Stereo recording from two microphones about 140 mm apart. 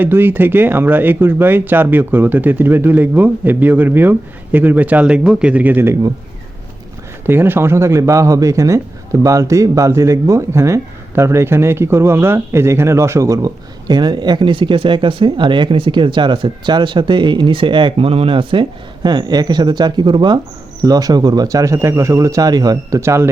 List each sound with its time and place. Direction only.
0.0 s speech: 15° right (ahead or behind)
7.3 s speech: 15° right (ahead or behind)